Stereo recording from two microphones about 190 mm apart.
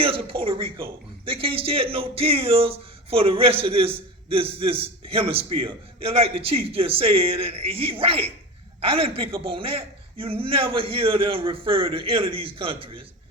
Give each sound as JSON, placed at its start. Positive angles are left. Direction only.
{"t": 0.0, "sound": "speech", "side_deg": -30}